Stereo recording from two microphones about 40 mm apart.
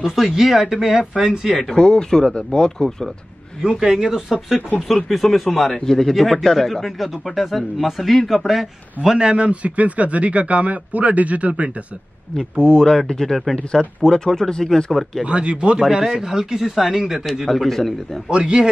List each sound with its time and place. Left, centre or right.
0.0 s speech: centre
1.8 s speech: centre
3.8 s speech: centre
4.7 s speech: centre
9.1 s speech: centre
9.4 s speech: right
12.5 s speech: centre
15.2 s speech: right
16.2 s speech: centre
17.5 s speech: centre
18.3 s speech: right